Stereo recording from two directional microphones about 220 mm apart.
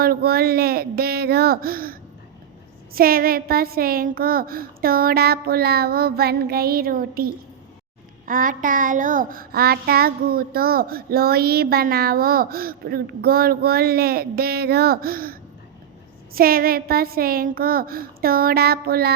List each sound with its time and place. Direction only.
0.0 s child singing: 45° right (ahead or behind)
8.3 s child singing: 40° right (ahead or behind)